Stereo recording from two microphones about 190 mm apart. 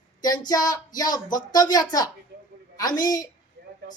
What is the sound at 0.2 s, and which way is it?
Speech, 20° left (ahead or behind).